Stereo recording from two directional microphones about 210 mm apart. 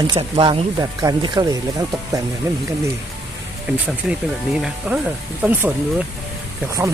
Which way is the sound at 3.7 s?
5° right (ahead or behind).